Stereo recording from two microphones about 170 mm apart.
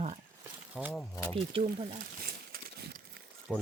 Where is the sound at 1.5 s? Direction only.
35° right (ahead or behind).